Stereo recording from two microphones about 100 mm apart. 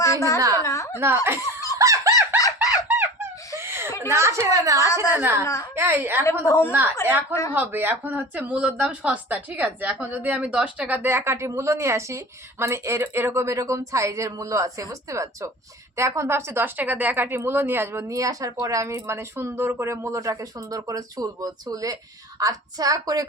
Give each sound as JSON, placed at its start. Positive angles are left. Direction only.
{"t": 0.0, "sound": "a woman's voice", "side_deg": 30}
{"t": 0.3, "sound": "a woman's voice", "side_deg": -35}
{"t": 0.6, "sound": "a sound", "side_deg": 30}
{"t": 0.9, "sound": "a woman's voice", "side_deg": -25}
{"t": 1.8, "sound": "fowl", "side_deg": -30}
{"t": 2.4, "sound": "squeak", "side_deg": 35}
{"t": 2.8, "sound": "a sound", "side_deg": -20}
{"t": 4.0, "sound": "a woman's voice", "side_deg": -30}
{"t": 6.4, "sound": "a woman's voice", "side_deg": 25}
{"t": 7.5, "sound": "a woman's voice", "side_deg": -20}